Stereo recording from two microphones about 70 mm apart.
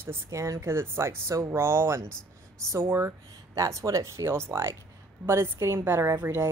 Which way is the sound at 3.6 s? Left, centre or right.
Right.